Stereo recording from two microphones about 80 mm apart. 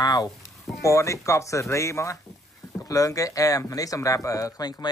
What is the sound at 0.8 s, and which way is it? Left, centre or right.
Speech, left.